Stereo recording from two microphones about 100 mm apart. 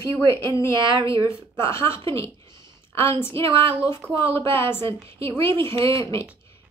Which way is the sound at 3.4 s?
65° right (ahead or behind).